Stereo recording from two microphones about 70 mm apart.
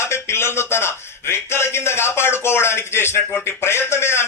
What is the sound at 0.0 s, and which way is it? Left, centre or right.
A man's voice, left.